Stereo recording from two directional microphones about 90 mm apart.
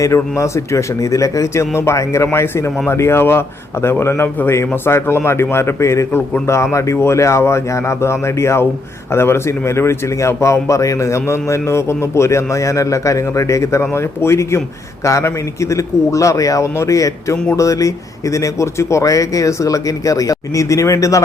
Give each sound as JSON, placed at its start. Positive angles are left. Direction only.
{"t": 0.0, "sound": "a man's voice", "side_deg": 35}